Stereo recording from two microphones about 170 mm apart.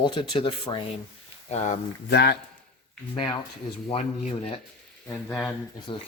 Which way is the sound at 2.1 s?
75° left (ahead or behind).